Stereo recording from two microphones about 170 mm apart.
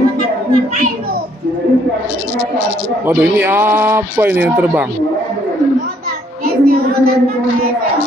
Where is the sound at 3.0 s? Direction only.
10° right (ahead or behind).